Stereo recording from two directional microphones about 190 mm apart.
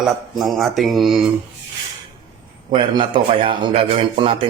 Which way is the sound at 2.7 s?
25° right (ahead or behind).